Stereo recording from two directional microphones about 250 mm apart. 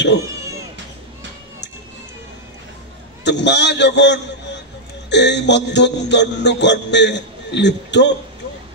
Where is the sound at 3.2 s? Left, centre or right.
Left.